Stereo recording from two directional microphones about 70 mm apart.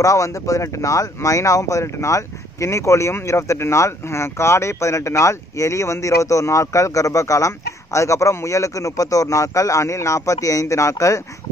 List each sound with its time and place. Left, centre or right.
0.0 s speech: left